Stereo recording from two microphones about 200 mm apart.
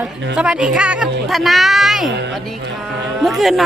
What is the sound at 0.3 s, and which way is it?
Speech, 5° right (ahead or behind).